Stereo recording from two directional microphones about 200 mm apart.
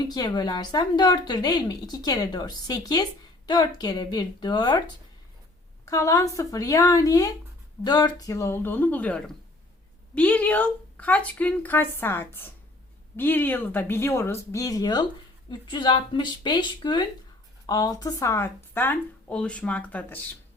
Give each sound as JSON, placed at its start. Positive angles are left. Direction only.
{"t": 0.1, "sound": "a woman's voice", "side_deg": 20}
{"t": 5.8, "sound": "a woman's voice", "side_deg": 15}